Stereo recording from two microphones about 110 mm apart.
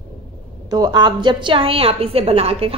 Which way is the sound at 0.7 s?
40° right (ahead or behind).